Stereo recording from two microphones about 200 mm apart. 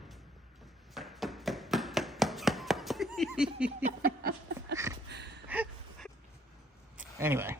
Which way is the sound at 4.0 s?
50° right (ahead or behind).